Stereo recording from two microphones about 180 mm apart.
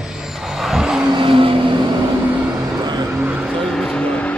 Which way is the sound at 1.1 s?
30° right (ahead or behind).